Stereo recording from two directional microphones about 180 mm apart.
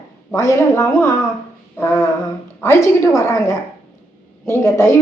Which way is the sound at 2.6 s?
15° left (ahead or behind).